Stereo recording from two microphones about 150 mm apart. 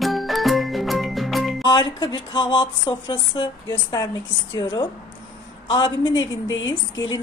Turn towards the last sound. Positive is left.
turn(degrees=30)  # may be behind; listen again after turning